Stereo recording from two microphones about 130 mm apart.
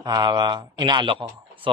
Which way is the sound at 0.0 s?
30° right (ahead or behind).